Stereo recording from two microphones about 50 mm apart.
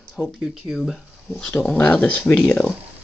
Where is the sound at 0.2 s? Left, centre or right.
Centre.